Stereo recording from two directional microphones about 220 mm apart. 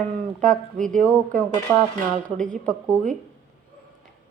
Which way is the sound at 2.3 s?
5° left (ahead or behind).